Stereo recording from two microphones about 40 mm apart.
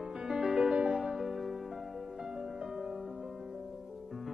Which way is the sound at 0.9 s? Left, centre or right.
Centre.